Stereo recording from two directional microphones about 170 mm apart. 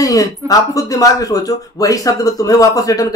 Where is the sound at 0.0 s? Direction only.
20° left (ahead or behind).